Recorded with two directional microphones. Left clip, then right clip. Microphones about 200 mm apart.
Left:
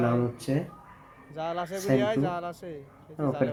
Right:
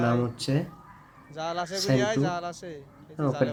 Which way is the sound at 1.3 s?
Centre (ahead or behind).